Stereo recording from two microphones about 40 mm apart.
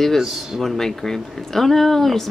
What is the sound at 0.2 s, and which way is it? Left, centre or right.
Speech, centre.